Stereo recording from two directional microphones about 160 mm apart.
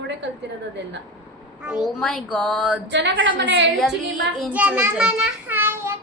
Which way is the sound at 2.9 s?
90° right.